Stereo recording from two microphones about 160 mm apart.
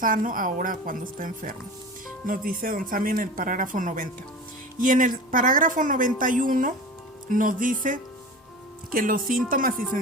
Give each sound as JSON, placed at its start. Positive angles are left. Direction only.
{"t": 0.0, "sound": "speech", "side_deg": -60}